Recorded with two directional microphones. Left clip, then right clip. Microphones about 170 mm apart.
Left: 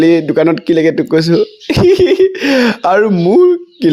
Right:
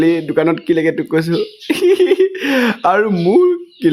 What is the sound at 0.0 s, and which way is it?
Speech, 25° left (ahead or behind).